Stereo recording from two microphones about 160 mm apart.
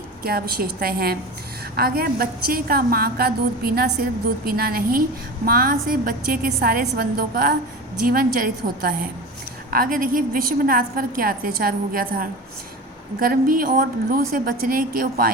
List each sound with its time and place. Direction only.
0.2 s a woman's voice: 70° right (ahead or behind)